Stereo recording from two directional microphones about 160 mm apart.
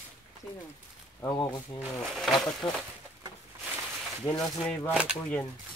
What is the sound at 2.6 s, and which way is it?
Speech, 25° left (ahead or behind).